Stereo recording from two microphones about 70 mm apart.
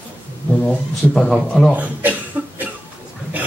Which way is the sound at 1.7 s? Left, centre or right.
Right.